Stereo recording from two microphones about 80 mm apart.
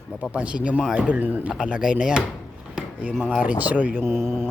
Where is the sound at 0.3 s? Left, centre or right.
Centre.